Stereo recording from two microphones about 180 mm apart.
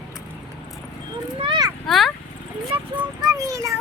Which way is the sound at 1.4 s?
25° right (ahead or behind).